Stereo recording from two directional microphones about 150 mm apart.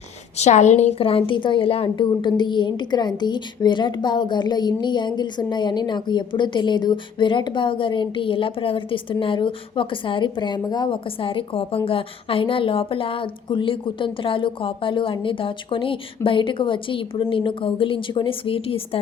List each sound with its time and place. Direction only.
0.3 s a woman's voice: 50° left (ahead or behind)